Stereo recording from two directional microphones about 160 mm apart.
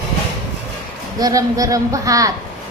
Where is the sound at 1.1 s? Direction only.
20° right (ahead or behind).